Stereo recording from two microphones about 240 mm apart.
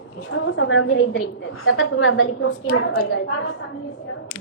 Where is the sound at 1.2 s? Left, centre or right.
Left.